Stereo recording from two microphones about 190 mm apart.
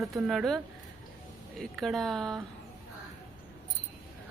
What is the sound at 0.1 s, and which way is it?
Speech, centre (ahead or behind).